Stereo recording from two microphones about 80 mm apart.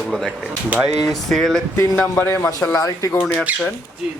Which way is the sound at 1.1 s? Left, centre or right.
Centre.